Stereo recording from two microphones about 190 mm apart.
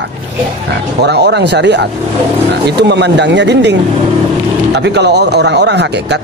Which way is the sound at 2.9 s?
65° right (ahead or behind).